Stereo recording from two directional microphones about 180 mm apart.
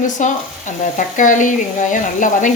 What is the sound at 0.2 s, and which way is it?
Speech, 45° left (ahead or behind).